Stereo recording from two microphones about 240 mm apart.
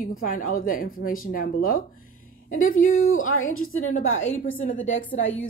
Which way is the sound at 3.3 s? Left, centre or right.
Left.